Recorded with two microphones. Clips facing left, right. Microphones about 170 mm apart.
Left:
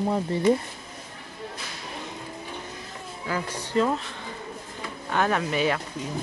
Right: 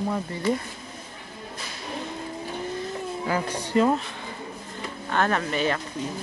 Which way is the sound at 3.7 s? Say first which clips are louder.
Right 2 dB; 10° right (ahead or behind).